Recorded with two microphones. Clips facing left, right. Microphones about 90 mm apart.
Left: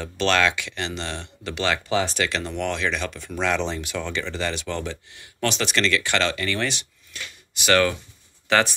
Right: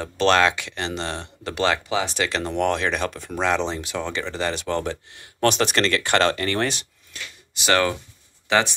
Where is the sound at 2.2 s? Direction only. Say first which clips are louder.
Right 2 dB; 35° right (ahead or behind).